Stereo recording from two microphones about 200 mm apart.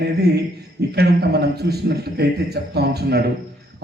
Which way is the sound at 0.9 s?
50° right (ahead or behind).